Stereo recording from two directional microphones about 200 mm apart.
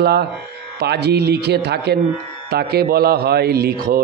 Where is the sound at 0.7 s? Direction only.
55° right (ahead or behind).